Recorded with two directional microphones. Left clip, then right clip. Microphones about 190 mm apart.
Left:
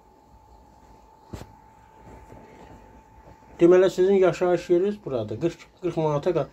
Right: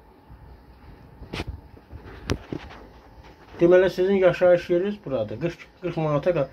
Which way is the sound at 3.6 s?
15° left (ahead or behind).